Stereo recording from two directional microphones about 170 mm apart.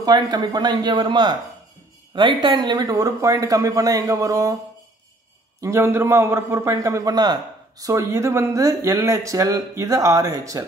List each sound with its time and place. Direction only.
0.0 s a man's voice: 25° right (ahead or behind)
5.6 s a man's voice: 15° right (ahead or behind)